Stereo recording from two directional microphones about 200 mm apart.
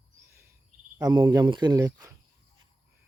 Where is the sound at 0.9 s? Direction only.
20° right (ahead or behind).